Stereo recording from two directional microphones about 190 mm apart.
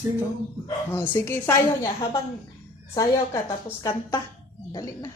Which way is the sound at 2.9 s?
20° left (ahead or behind).